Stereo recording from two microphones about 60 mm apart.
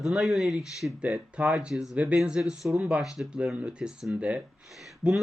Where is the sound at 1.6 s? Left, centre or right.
Centre.